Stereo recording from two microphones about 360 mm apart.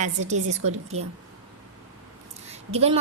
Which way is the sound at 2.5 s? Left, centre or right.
Centre.